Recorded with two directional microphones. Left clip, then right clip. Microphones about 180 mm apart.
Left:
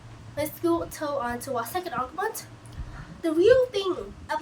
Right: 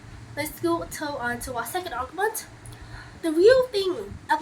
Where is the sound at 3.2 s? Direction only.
20° left (ahead or behind).